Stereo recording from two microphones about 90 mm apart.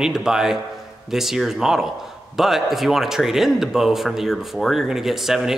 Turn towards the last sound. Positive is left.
turn(degrees=-5)  # may be behind; listen again after turning